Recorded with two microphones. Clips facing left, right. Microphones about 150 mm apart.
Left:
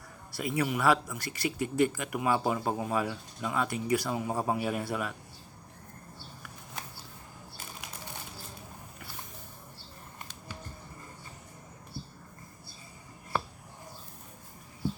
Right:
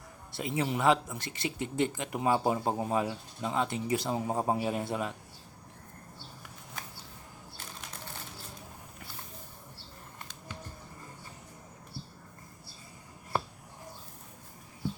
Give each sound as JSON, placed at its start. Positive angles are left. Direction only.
{"t": 0.3, "sound": "speech", "side_deg": -25}